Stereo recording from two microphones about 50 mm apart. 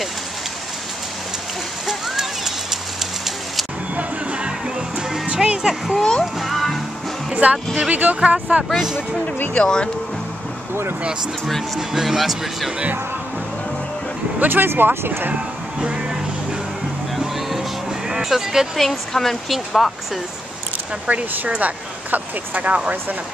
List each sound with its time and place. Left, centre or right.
1.9 s rain on surface: centre
3.9 s music: right
5.9 s a child's voice: centre
6.4 s music: centre
7.4 s speech: right
9.6 s a child's voice: centre
10.7 s speech: right
11.4 s speech: centre
14.4 s speech: right
15.8 s music: centre
17.1 s music: centre
18.8 s speech: centre
21.1 s speech: right